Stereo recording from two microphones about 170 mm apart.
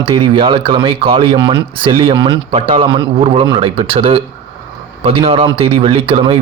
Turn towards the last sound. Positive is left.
turn(degrees=-35)  # may be behind; listen again after turning